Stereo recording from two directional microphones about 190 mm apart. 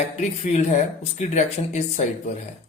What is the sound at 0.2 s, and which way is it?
Speech, 35° left (ahead or behind).